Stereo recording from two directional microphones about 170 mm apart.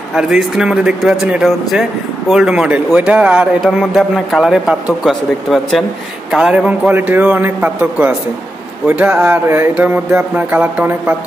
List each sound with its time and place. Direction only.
0.1 s speech: 5° right (ahead or behind)
6.3 s music: 5° right (ahead or behind)